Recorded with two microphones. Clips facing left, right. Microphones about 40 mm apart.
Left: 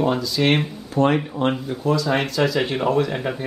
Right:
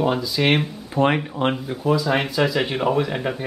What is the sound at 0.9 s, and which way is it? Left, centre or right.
Speech, right.